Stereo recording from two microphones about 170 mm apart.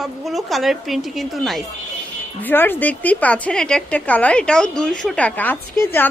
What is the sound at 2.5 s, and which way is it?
A woman's voice, 10° left (ahead or behind).